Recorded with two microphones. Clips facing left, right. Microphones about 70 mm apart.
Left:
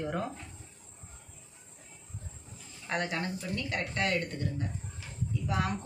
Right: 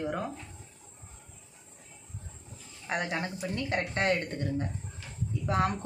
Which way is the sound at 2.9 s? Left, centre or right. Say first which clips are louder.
Right 1 dB; centre.